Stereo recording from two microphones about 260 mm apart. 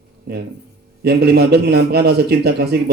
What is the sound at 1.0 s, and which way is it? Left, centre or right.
Speech, right.